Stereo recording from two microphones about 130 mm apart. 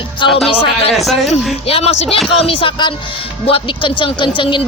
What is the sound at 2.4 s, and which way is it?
Speech, 45° left (ahead or behind).